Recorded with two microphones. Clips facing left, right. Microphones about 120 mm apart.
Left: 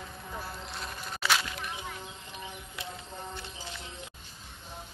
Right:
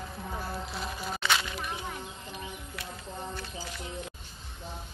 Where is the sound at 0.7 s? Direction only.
Centre (ahead or behind).